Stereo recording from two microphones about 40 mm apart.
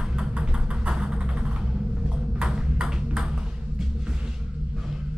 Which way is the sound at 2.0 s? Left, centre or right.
Centre.